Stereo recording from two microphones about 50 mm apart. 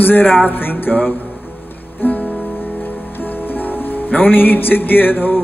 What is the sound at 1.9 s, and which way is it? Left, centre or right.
Music, left.